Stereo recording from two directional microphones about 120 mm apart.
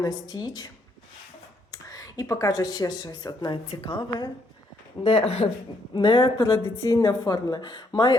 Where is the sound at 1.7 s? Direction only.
30° left (ahead or behind).